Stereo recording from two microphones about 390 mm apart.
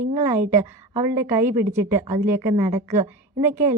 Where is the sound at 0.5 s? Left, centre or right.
Centre.